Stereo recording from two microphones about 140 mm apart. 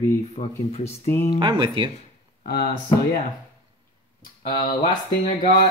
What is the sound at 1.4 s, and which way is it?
Speech, 35° right (ahead or behind).